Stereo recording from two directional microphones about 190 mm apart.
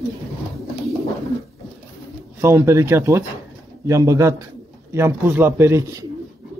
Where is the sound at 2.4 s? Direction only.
15° right (ahead or behind).